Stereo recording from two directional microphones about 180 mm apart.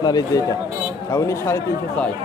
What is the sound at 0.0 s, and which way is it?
Speech, 20° left (ahead or behind).